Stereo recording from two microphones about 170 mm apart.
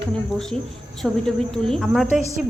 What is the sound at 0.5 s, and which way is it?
Speech, 35° right (ahead or behind).